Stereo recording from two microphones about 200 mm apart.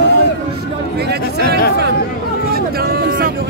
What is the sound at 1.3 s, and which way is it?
Speech, 50° left (ahead or behind).